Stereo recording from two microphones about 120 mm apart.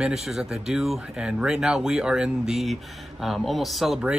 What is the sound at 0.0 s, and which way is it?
Speech, 5° right (ahead or behind).